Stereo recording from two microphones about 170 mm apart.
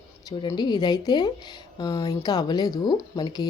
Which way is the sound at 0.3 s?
25° left (ahead or behind).